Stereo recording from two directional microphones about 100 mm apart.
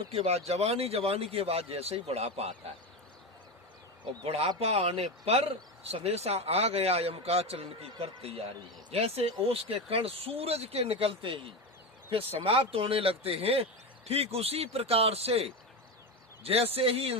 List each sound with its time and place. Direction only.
0.1 s speech: 85° right
4.3 s a man's voice: 80° right
8.9 s a man's voice: 90° right; by 11.5 s 65° right (ahead or behind)
12.1 s a man's voice: 80° right